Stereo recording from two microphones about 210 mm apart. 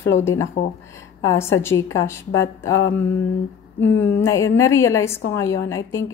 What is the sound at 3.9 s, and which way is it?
A woman's voice, 10° left (ahead or behind).